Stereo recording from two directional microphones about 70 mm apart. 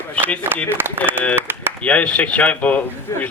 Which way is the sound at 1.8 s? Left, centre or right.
Centre.